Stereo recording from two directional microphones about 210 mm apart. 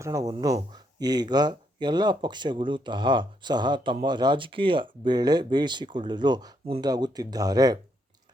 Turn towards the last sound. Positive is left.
turn(degrees=-20)  # may be behind; listen again after turning